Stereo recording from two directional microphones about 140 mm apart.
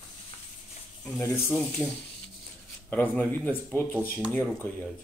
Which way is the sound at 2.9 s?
10° left (ahead or behind).